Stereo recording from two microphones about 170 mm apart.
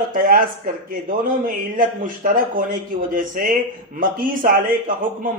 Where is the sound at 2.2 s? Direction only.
50° right (ahead or behind).